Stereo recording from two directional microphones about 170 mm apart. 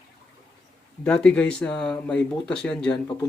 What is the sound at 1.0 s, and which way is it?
Speech, 5° left (ahead or behind).